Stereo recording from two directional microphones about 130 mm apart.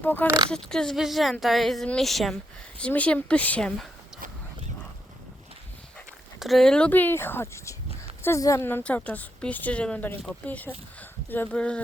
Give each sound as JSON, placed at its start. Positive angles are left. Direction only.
{"t": 0.0, "sound": "a woman's voice", "side_deg": 15}
{"t": 0.3, "sound": "speech", "side_deg": -35}
{"t": 0.5, "sound": "a woman's voice", "side_deg": 5}
{"t": 6.4, "sound": "a woman's voice", "side_deg": 0}